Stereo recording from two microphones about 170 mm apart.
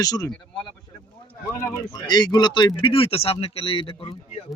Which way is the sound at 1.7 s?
25° left (ahead or behind).